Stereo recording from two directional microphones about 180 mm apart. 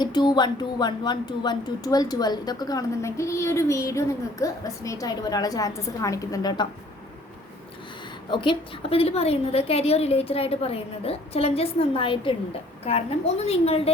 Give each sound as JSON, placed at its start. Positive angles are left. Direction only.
{"t": 0.0, "sound": "speech", "side_deg": 25}
{"t": 8.3, "sound": "a woman's voice", "side_deg": 25}